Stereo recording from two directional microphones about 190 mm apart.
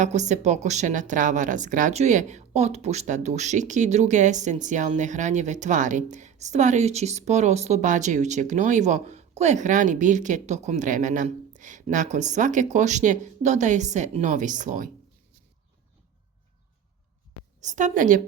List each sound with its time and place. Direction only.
0.0 s speech: 40° right (ahead or behind)
17.6 s speech: 40° right (ahead or behind)